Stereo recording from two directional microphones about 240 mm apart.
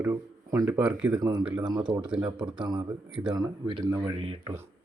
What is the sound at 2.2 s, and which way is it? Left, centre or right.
A man's voice, centre.